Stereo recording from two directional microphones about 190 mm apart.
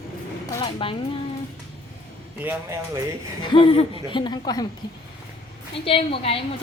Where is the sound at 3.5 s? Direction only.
30° left (ahead or behind).